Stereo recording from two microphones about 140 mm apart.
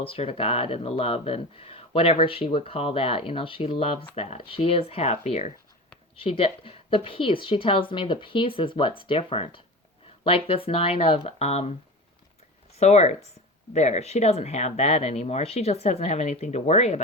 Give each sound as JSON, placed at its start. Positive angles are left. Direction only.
{"t": 0.0, "sound": "speech", "side_deg": 45}
{"t": 12.8, "sound": "speech", "side_deg": 50}